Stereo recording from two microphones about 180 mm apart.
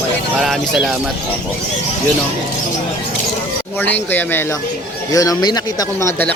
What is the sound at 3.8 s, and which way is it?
Speech, 10° left (ahead or behind).